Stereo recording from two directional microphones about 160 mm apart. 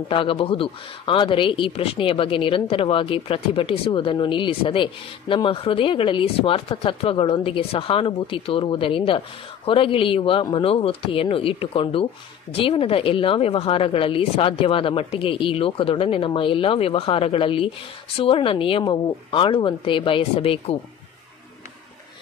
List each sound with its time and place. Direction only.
0.1 s speech: 35° left (ahead or behind)